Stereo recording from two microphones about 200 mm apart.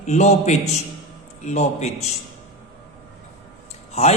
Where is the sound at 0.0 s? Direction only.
35° left (ahead or behind).